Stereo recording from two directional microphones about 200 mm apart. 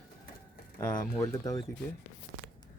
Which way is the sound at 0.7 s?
15° left (ahead or behind).